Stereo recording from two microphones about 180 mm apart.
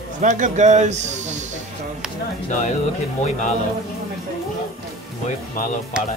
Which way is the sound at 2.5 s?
45° left (ahead or behind).